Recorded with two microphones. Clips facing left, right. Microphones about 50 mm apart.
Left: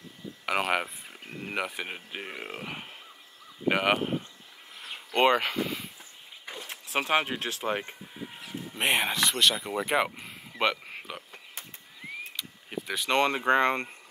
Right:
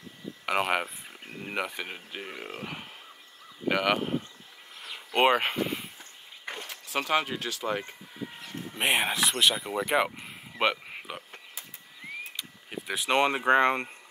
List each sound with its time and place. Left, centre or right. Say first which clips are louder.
0.5 s speech: even; centre
5.1 s speech: even; centre
5.4 s speech: right 1 dB; right
7.1 s speech: even; left
8.4 s a sound: left 1 dB; centre
8.9 s speech: even; centre
9.6 s speech: right 1 dB; centre
10.6 s speech: right 1 dB; centre
11.0 s a sound: right 1 dB; centre
12.4 s a sound: left 2 dB; centre
12.9 s speech: right 1 dB; centre